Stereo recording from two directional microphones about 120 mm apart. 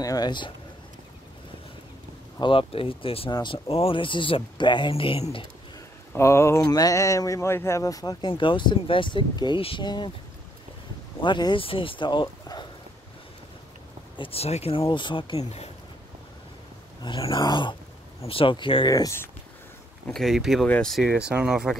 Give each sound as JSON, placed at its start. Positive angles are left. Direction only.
{"t": 0.0, "sound": "a man's voice", "side_deg": 30}
{"t": 2.4, "sound": "speech", "side_deg": 50}
{"t": 3.3, "sound": "speech", "side_deg": 35}
{"t": 3.6, "sound": "speech", "side_deg": 50}
{"t": 6.1, "sound": "speech", "side_deg": 20}
{"t": 8.3, "sound": "speech", "side_deg": 45}
{"t": 11.2, "sound": "speech", "side_deg": 40}
{"t": 14.1, "sound": "speech", "side_deg": 50}
{"t": 17.0, "sound": "speech", "side_deg": 45}
{"t": 18.2, "sound": "speech", "side_deg": 50}
{"t": 18.9, "sound": "speech", "side_deg": 30}
{"t": 20.1, "sound": "speech", "side_deg": 0}
{"t": 21.0, "sound": "speech", "side_deg": -5}